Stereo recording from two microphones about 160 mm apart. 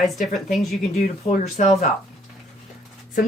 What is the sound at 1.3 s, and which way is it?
Speech, 45° left (ahead or behind).